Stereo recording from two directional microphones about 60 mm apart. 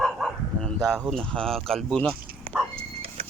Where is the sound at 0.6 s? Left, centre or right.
Centre.